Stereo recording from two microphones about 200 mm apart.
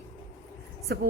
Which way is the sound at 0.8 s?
50° right (ahead or behind).